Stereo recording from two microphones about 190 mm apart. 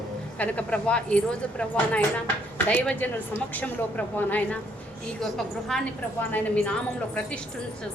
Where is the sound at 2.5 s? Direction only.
10° left (ahead or behind).